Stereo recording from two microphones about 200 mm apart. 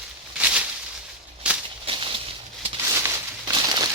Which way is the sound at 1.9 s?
25° right (ahead or behind).